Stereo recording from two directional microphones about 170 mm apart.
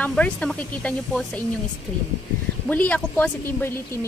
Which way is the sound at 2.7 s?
10° left (ahead or behind).